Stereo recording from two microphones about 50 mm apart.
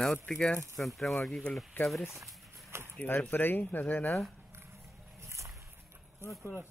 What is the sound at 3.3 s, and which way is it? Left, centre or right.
Speech, left.